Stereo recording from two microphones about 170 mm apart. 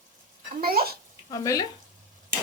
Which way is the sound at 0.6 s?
60° right (ahead or behind).